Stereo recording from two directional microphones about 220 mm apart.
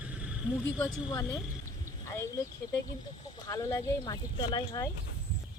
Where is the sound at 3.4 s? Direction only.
15° left (ahead or behind).